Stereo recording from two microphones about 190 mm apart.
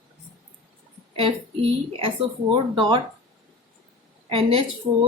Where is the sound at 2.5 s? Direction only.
25° right (ahead or behind).